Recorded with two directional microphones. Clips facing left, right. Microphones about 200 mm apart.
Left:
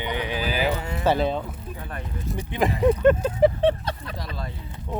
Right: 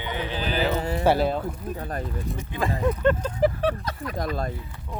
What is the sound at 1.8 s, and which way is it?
Speech, 35° right (ahead or behind).